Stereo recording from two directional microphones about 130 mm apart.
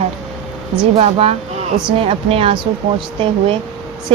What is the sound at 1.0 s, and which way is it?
Speech, 45° right (ahead or behind).